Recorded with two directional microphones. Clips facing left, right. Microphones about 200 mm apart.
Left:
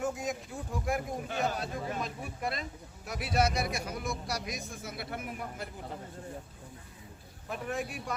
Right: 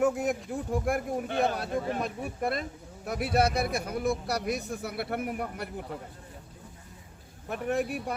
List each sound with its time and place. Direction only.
0.0 s a man's voice: 60° right (ahead or behind)
7.5 s a man's voice: 60° right (ahead or behind)